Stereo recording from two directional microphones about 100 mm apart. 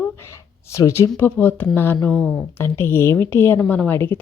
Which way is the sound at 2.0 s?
5° left (ahead or behind).